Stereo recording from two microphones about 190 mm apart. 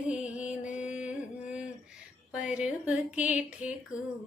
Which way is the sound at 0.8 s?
5° right (ahead or behind).